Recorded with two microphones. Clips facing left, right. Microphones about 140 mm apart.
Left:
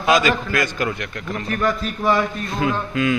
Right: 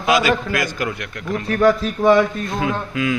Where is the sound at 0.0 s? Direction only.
10° right (ahead or behind).